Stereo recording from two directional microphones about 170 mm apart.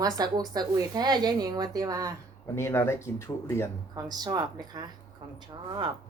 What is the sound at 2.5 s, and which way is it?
Speech, 15° left (ahead or behind).